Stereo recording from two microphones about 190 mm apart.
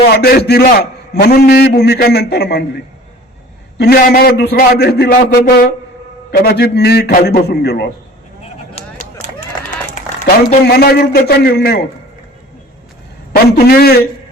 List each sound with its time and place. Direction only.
0.2 s a man's voice: 55° left (ahead or behind)
3.8 s a man's voice: 55° left (ahead or behind)
10.7 s a man's voice: 55° left (ahead or behind)
13.3 s a man's voice: 50° left (ahead or behind)